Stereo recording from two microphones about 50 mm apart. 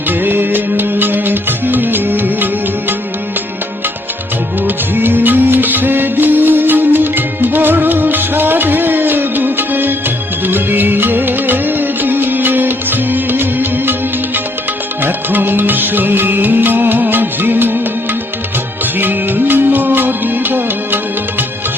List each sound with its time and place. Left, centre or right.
0.1 s music: right
4.6 s music: right
15.0 s music: right
18.9 s music: right